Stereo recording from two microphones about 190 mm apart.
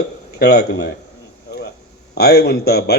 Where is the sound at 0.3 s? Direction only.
60° left (ahead or behind).